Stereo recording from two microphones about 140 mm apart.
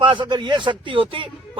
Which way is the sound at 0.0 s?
35° right (ahead or behind).